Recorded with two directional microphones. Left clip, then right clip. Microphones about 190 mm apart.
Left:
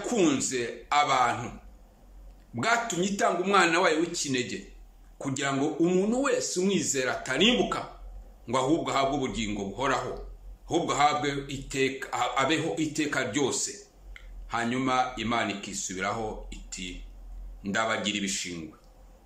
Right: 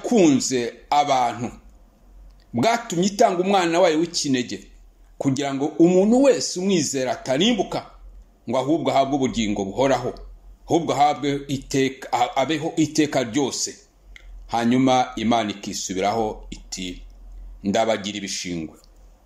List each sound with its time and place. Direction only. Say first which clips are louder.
0.0 s a man's voice: right 8 dB; 25° right (ahead or behind)
2.5 s a man's voice: right 6 dB; 30° right (ahead or behind)